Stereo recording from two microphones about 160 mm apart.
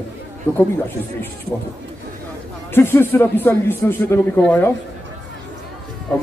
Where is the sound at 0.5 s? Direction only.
15° left (ahead or behind).